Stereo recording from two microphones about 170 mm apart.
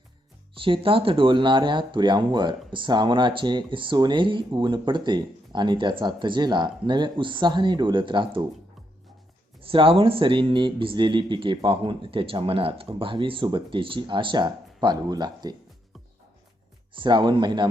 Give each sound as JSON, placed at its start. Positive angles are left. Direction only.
{"t": 0.6, "sound": "speech", "side_deg": -30}
{"t": 9.6, "sound": "speech", "side_deg": -30}
{"t": 16.9, "sound": "speech", "side_deg": -30}